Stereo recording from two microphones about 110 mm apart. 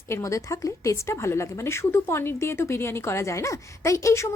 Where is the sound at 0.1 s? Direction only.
30° left (ahead or behind).